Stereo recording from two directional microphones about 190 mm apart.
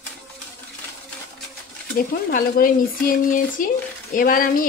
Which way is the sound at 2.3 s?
45° left (ahead or behind).